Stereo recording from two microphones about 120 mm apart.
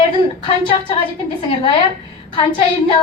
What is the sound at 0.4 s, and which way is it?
Speech, 45° left (ahead or behind).